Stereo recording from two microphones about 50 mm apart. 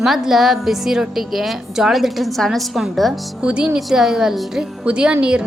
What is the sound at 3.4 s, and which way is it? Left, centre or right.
Speech, right.